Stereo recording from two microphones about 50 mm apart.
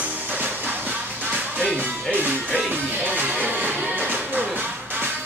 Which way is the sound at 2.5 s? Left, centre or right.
Right.